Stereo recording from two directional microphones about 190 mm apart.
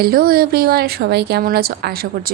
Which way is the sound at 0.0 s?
50° right (ahead or behind).